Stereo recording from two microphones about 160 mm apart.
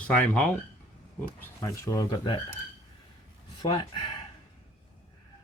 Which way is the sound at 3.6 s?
30° left (ahead or behind).